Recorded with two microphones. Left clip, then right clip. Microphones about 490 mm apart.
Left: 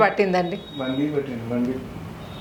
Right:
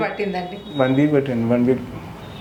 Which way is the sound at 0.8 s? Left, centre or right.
Right.